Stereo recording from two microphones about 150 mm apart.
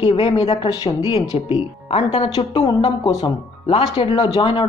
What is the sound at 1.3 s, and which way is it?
A woman's voice, 40° left (ahead or behind).